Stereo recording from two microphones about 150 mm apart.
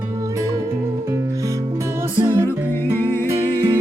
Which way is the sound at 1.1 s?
20° right (ahead or behind).